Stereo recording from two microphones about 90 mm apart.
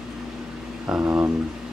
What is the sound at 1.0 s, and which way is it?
Speech, 25° right (ahead or behind).